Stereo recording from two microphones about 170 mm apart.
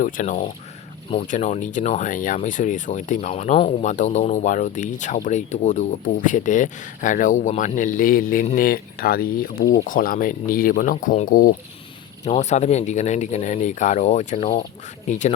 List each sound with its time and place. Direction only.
0.0 s speech: 50° left (ahead or behind)
12.2 s speech: 40° left (ahead or behind)